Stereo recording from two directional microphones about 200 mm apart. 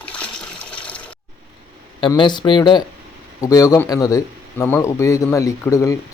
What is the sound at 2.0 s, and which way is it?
Speech, 25° left (ahead or behind).